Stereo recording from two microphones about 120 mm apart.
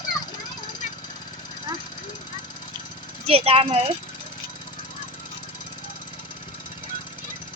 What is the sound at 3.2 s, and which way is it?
Speech, 55° right (ahead or behind).